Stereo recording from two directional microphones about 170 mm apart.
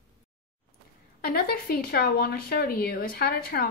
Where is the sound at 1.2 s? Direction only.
65° left (ahead or behind).